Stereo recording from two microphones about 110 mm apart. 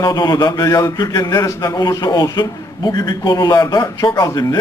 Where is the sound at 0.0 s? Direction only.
40° left (ahead or behind).